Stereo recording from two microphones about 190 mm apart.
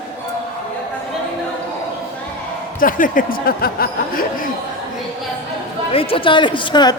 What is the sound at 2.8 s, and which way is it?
A man's voice, 45° left (ahead or behind).